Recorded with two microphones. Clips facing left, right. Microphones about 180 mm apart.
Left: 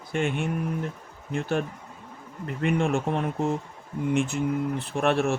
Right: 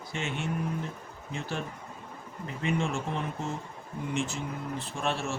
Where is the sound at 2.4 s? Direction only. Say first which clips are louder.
Left 6 dB; 60° left (ahead or behind).